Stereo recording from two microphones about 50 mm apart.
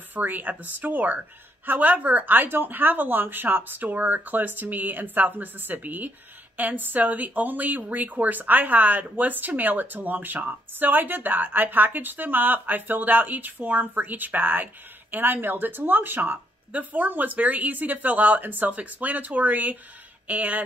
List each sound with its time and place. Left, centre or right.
0.1 s speech: right